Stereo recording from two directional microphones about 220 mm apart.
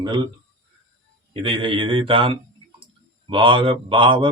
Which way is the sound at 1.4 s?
20° right (ahead or behind).